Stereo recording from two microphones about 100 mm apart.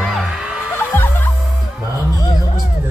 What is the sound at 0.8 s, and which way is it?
Music, 20° left (ahead or behind).